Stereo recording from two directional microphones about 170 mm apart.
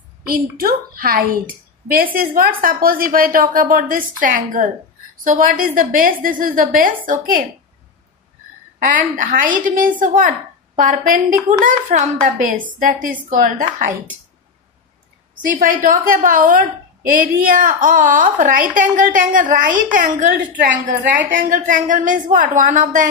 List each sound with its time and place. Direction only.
0.3 s a woman's voice: 60° right (ahead or behind)
8.7 s a woman's voice: 50° right (ahead or behind)
15.5 s a woman's voice: 55° right (ahead or behind)